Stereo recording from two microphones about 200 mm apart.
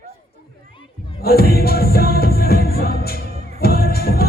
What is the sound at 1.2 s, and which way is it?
Music, 50° left (ahead or behind).